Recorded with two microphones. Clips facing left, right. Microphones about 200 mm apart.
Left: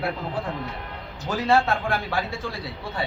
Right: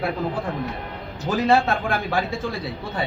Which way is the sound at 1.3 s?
15° right (ahead or behind).